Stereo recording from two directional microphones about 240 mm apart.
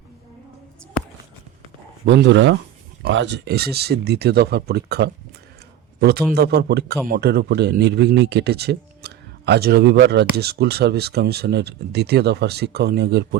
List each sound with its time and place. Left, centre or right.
2.0 s a man's voice: right